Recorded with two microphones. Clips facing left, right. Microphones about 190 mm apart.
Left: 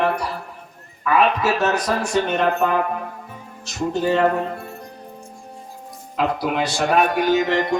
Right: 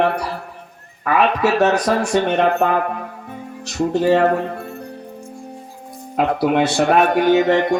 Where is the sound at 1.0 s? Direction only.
55° right (ahead or behind).